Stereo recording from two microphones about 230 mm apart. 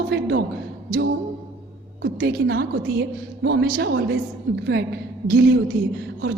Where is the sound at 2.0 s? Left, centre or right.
Right.